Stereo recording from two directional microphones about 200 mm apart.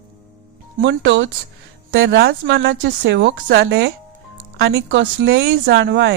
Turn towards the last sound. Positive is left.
turn(degrees=-55)  # may be behind; listen again after turning